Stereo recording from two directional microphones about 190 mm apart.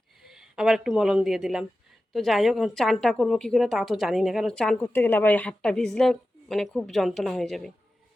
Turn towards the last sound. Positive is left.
turn(degrees=0)  # may be behind; listen again after turning